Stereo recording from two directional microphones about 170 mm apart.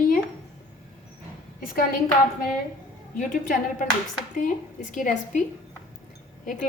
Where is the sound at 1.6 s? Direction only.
55° left (ahead or behind).